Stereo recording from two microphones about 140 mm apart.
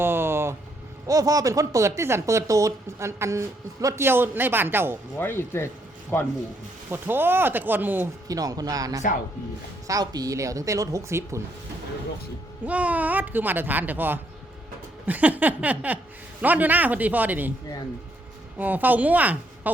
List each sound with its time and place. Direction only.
0.0 s vehicle: 15° right (ahead or behind)
1.0 s speech: 25° right (ahead or behind)
5.2 s speech: 15° left (ahead or behind)
6.9 s speech: 15° right (ahead or behind)
8.3 s speech: 25° right (ahead or behind)
12.6 s speech: 10° right (ahead or behind)
18.5 s speech: 10° right (ahead or behind)